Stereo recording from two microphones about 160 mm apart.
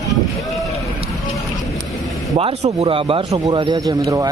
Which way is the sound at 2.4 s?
40° right (ahead or behind).